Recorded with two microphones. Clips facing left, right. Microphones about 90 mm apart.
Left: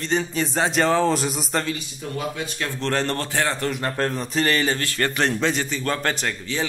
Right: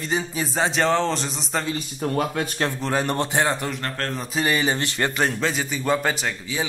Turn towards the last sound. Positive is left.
turn(degrees=-5)  # may be behind; listen again after turning